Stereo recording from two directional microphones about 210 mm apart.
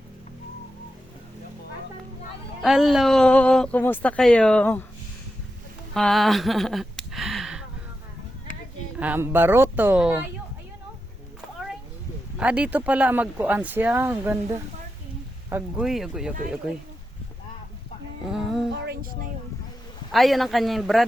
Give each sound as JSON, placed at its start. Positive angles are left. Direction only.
{"t": 2.6, "sound": "speech", "side_deg": 0}
{"t": 5.9, "sound": "a sound", "side_deg": 0}
{"t": 9.0, "sound": "speech", "side_deg": -10}
{"t": 12.4, "sound": "speech", "side_deg": -5}
{"t": 18.3, "sound": "speech", "side_deg": 0}
{"t": 18.8, "sound": "speech", "side_deg": -50}
{"t": 20.1, "sound": "speech", "side_deg": 0}